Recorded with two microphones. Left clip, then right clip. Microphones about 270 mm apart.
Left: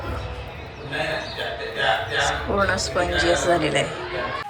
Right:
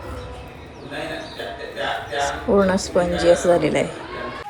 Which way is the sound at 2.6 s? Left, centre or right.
Centre.